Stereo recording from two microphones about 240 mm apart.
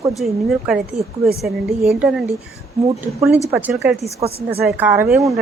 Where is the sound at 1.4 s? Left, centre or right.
Centre.